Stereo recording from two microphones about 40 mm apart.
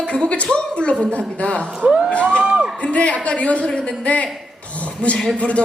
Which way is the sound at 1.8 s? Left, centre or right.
Right.